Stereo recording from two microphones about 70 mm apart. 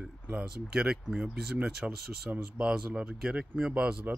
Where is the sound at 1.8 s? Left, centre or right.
Centre.